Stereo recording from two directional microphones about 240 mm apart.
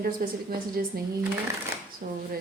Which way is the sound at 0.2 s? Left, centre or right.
Right.